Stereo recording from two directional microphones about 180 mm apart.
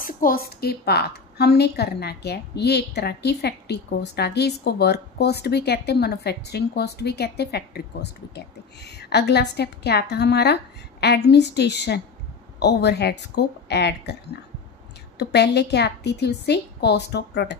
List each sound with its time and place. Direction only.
0.0 s a woman's voice: 50° left (ahead or behind); by 14.1 s 70° left (ahead or behind)
15.1 s a woman's voice: 70° left (ahead or behind)